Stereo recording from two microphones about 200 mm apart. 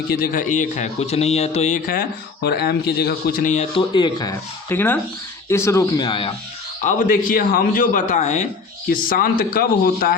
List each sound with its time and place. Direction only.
0.2 s speech: 45° left (ahead or behind)
2.4 s speech: 55° left (ahead or behind); by 3.7 s 40° left (ahead or behind)
3.8 s speech: 20° left (ahead or behind)
6.8 s speech: 45° left (ahead or behind)